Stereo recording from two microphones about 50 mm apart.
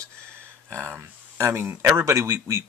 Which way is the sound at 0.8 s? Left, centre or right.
Right.